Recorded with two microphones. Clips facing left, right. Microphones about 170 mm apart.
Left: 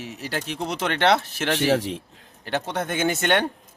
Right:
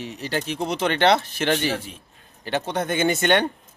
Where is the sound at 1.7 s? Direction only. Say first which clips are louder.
Left 8 dB; 75° left (ahead or behind).